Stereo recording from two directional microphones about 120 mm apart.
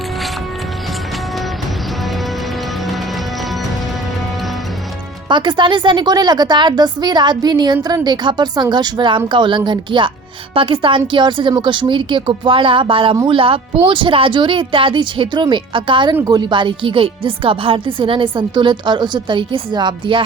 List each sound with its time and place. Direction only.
5.3 s a woman's voice: 40° right (ahead or behind)